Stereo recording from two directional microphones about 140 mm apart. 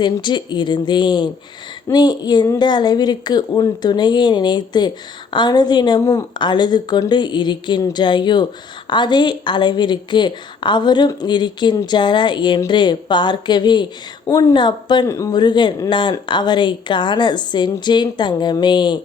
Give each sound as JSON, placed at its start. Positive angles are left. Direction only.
{"t": 0.0, "sound": "speech", "side_deg": 35}